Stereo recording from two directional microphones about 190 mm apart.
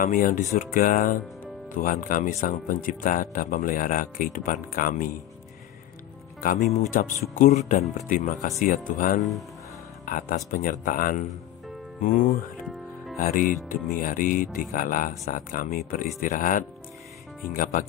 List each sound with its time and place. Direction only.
0.0 s speech: 45° left (ahead or behind)
6.4 s speech: 45° left (ahead or behind)